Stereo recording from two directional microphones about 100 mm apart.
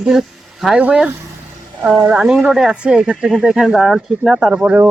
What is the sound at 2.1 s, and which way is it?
Speech, 5° right (ahead or behind).